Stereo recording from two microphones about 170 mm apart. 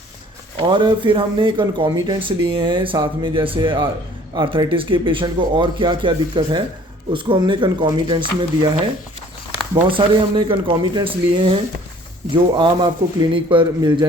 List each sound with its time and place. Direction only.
0.6 s speech: 25° right (ahead or behind)
9.9 s speech: 30° right (ahead or behind)